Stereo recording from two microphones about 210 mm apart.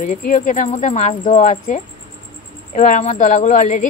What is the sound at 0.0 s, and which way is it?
Speech, 40° left (ahead or behind).